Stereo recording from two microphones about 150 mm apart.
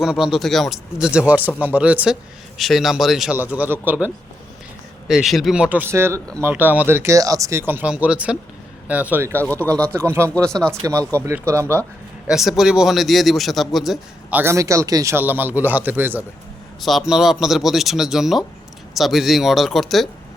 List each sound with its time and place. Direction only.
0.0 s a man's voice: 5° right (ahead or behind); by 7.6 s 20° right (ahead or behind)
7.7 s a man's voice: 10° right (ahead or behind)
9.4 s speech: 10° left (ahead or behind)
9.9 s a man's voice: 15° right (ahead or behind)
10.5 s speech: 5° left (ahead or behind)
11.5 s a man's voice: 20° right (ahead or behind)
12.3 s a man's voice: 5° right (ahead or behind)